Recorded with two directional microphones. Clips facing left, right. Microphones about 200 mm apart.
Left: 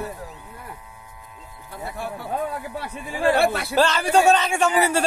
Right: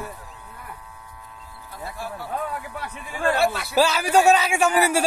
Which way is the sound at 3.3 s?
55° left (ahead or behind).